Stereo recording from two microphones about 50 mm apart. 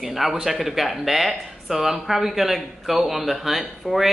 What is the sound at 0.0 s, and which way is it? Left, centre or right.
Speech, centre.